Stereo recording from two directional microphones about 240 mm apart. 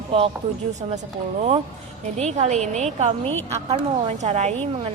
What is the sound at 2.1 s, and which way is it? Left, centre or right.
A woman's voice, right.